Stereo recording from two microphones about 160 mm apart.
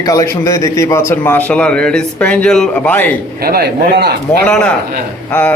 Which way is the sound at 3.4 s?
80° right.